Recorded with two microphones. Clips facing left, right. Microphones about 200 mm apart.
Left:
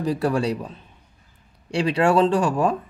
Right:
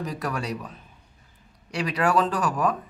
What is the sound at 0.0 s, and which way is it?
Speech, 30° left (ahead or behind).